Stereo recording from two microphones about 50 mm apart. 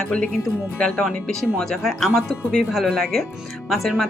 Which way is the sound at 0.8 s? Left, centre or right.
Left.